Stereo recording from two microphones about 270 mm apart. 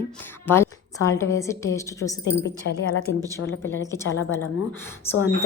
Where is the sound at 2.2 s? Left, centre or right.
Left.